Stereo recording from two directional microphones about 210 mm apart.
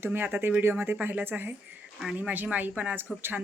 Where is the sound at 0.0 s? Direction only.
10° right (ahead or behind).